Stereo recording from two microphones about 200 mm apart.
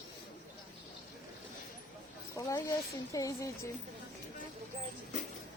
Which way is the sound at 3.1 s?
15° left (ahead or behind).